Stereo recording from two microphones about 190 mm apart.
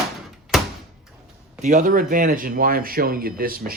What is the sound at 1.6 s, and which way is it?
Speech, 45° right (ahead or behind).